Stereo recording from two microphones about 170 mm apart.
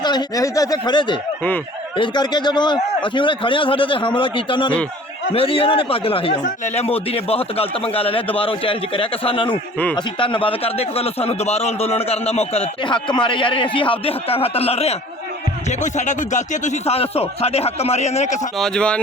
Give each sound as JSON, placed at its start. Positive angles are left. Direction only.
{"t": 0.0, "sound": "a man's voice", "side_deg": 25}
{"t": 18.6, "sound": "speech", "side_deg": 5}